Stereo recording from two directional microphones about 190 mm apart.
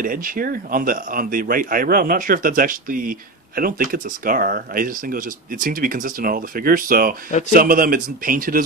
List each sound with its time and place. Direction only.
0.0 s speech: 45° right (ahead or behind)
7.2 s speech: 40° left (ahead or behind)
7.5 s speech: 45° right (ahead or behind)